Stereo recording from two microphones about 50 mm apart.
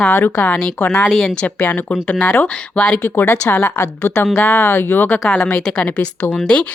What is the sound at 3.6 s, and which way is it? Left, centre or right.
Speech, left.